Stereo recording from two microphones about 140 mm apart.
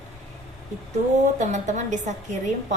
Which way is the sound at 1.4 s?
55° right (ahead or behind).